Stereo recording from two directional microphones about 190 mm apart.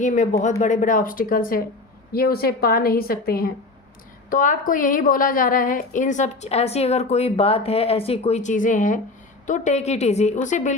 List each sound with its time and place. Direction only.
0.0 s a woman's voice: 40° left (ahead or behind)